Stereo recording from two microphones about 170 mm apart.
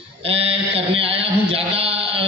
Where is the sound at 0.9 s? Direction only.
35° right (ahead or behind).